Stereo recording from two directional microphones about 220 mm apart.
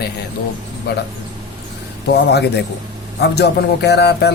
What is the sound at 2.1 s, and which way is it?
Speech, 50° left (ahead or behind).